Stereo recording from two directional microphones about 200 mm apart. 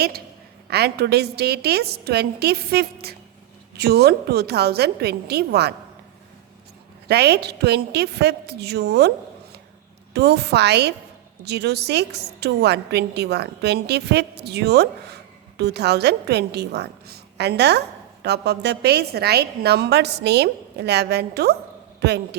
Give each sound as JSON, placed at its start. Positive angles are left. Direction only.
{"t": 0.7, "sound": "a woman's voice", "side_deg": -55}
{"t": 7.1, "sound": "a woman's voice", "side_deg": -55}